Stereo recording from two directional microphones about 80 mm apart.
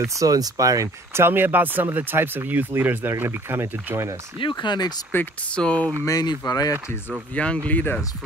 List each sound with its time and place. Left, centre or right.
0.0 s speech: right
1.2 s speech: right
4.4 s speech: left
5.1 s speech: left
5.6 s speech: centre
6.2 s speech: left
7.3 s speech: centre